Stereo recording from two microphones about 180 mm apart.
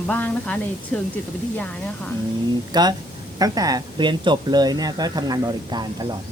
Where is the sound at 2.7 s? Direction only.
25° right (ahead or behind).